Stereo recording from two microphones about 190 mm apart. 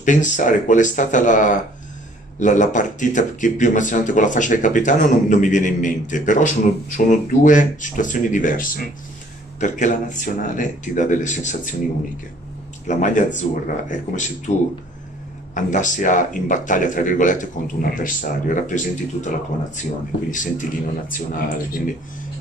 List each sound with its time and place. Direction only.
0.0 s speech: 40° left (ahead or behind)
12.8 s speech: 40° left (ahead or behind)